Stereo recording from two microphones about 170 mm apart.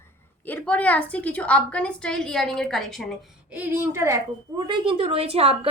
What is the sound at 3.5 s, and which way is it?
A woman's voice, 10° right (ahead or behind).